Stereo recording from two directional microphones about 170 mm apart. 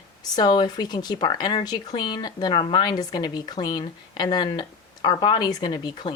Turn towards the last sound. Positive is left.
turn(degrees=25)  # may be behind; listen again after turning